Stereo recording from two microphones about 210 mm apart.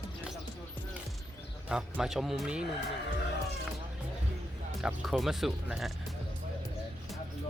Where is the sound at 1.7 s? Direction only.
5° right (ahead or behind).